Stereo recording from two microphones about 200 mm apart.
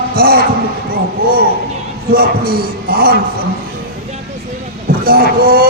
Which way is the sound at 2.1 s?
45° right (ahead or behind).